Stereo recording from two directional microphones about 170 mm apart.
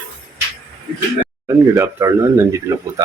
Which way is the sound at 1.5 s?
15° right (ahead or behind).